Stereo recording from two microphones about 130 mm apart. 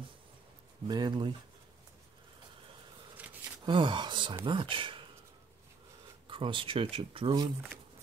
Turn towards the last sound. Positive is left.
turn(degrees=-45)  # may be behind; listen again after turning